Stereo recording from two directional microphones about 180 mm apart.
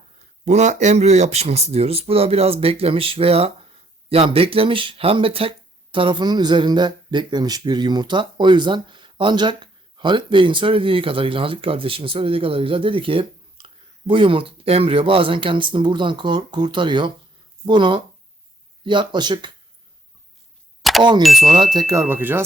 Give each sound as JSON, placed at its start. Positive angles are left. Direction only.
{"t": 0.4, "sound": "speech", "side_deg": -40}
{"t": 20.8, "sound": "a sound", "side_deg": 0}
{"t": 21.2, "sound": "speech", "side_deg": 0}
{"t": 21.6, "sound": "speech", "side_deg": -20}